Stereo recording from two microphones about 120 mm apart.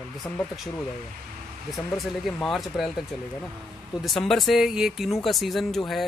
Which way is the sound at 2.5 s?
Centre (ahead or behind).